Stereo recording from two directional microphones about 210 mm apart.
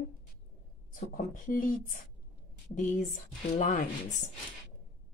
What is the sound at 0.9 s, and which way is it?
Speech, 40° left (ahead or behind).